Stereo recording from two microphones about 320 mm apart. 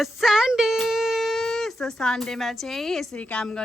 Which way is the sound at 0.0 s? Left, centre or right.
Centre.